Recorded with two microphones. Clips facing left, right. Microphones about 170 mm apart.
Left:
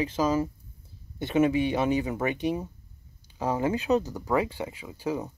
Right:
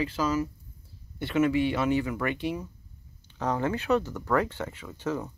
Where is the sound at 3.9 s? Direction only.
35° left (ahead or behind).